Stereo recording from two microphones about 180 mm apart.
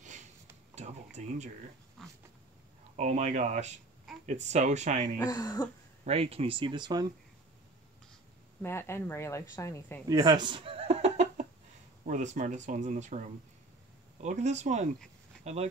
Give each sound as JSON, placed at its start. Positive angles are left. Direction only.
{"t": 0.0, "sound": "a sound", "side_deg": -45}
{"t": 0.7, "sound": "speech", "side_deg": -40}
{"t": 2.0, "sound": "a sound", "side_deg": 0}
{"t": 3.0, "sound": "speech", "side_deg": -40}
{"t": 5.2, "sound": "speech", "side_deg": 20}
{"t": 6.0, "sound": "speech", "side_deg": -35}
{"t": 8.6, "sound": "speech", "side_deg": 15}
{"t": 10.0, "sound": "laughter", "side_deg": -20}
{"t": 12.0, "sound": "speech", "side_deg": -45}